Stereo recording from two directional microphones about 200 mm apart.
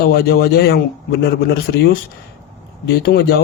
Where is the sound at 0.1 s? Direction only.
50° left (ahead or behind).